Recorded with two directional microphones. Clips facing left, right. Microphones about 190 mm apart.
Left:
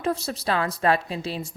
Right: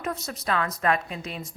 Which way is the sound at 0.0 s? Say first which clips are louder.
Left 5 dB; 30° left (ahead or behind).